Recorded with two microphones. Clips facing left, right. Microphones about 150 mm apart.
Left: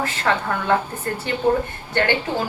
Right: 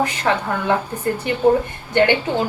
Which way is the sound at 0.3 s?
15° right (ahead or behind).